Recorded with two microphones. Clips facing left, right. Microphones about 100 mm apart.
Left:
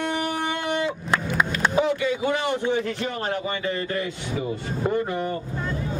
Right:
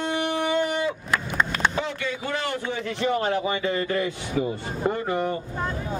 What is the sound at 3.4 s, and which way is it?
Speech, 30° right (ahead or behind).